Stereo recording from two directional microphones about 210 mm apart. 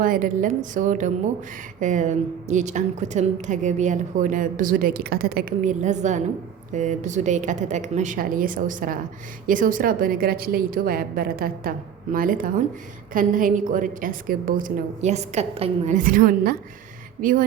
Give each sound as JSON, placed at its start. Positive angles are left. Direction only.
{"t": 0.0, "sound": "a woman's voice", "side_deg": -40}